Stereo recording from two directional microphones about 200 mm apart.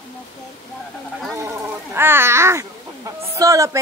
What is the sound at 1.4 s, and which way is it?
Speech, 10° right (ahead or behind).